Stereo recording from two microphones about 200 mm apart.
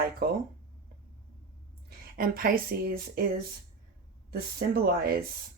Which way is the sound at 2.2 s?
45° right (ahead or behind).